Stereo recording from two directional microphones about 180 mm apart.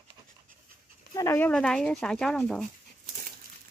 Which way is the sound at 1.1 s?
15° left (ahead or behind).